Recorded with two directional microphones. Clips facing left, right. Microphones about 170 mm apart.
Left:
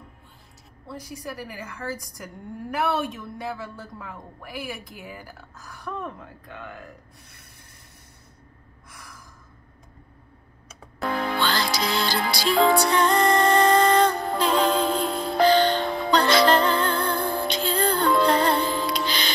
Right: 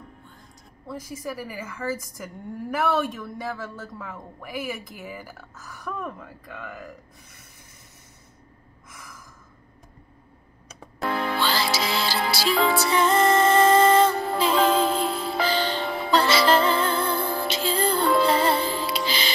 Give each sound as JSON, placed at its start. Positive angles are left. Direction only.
{"t": 1.1, "sound": "speech", "side_deg": -5}
{"t": 3.0, "sound": "speech", "side_deg": 0}
{"t": 3.4, "sound": "speech", "side_deg": 15}
{"t": 4.0, "sound": "speech", "side_deg": -5}
{"t": 11.0, "sound": "music", "side_deg": -5}